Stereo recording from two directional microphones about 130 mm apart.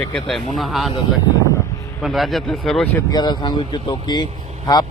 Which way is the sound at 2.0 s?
Centre (ahead or behind).